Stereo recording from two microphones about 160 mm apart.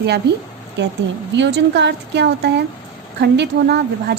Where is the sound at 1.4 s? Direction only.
90° right.